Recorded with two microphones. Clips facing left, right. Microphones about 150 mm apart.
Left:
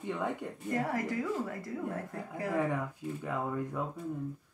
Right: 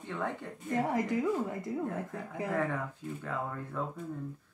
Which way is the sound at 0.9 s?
20° right (ahead or behind).